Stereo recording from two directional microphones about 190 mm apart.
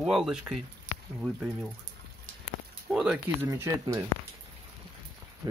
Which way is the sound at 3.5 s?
15° right (ahead or behind).